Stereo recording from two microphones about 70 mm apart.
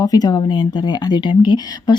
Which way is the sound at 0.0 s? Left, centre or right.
Left.